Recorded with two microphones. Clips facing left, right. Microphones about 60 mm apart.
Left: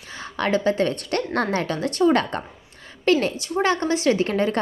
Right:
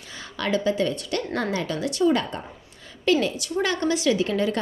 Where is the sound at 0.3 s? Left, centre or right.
Left.